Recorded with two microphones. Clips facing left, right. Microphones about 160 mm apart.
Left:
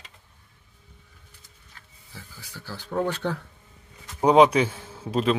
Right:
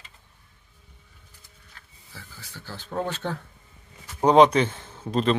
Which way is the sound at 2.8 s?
15° right (ahead or behind).